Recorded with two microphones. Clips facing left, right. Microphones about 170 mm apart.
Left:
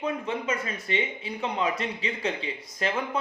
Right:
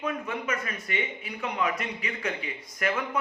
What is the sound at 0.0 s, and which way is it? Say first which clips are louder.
Speech: left 2 dB; 25° left (ahead or behind).